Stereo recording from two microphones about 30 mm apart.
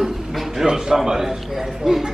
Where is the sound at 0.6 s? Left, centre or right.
Right.